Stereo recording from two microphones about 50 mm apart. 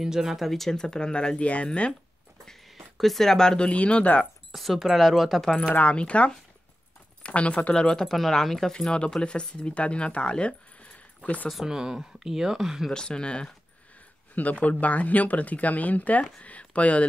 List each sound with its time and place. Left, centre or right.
0.0 s speech: centre
0.4 s speech: centre; by 2.0 s left
3.0 s speech: centre; by 4.2 s left
4.2 s speech: centre
5.8 s speech: left
7.8 s speech: centre
8.7 s speech: centre
11.6 s speech: centre
12.9 s speech: centre
14.3 s speech: left